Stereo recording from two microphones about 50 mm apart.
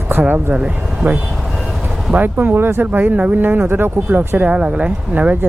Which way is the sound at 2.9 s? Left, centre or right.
Right.